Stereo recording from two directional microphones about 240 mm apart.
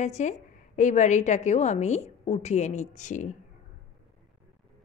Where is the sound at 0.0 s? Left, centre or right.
Left.